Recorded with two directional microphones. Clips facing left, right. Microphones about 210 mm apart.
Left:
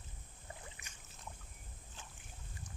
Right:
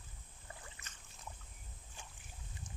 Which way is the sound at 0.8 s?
15° left (ahead or behind).